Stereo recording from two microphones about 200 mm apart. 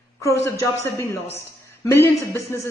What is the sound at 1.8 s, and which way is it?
Speech, 10° left (ahead or behind).